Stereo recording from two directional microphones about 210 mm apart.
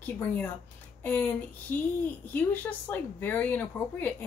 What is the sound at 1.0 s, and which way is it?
Speech, 10° left (ahead or behind).